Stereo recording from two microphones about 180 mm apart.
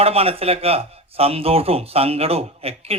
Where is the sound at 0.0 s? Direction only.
35° right (ahead or behind).